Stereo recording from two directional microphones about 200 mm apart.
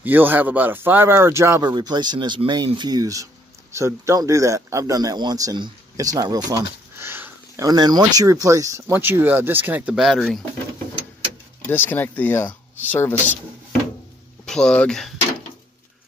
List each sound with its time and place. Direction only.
0.0 s speech: 10° right (ahead or behind)
11.6 s speech: 10° left (ahead or behind)
14.4 s speech: 5° left (ahead or behind)